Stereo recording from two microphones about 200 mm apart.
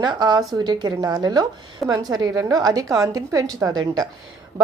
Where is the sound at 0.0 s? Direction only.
20° right (ahead or behind).